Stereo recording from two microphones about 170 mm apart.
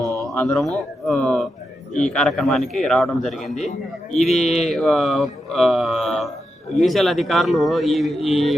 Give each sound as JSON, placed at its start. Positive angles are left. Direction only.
{"t": 0.2, "sound": "speech", "side_deg": 0}
{"t": 1.0, "sound": "mantra", "side_deg": 0}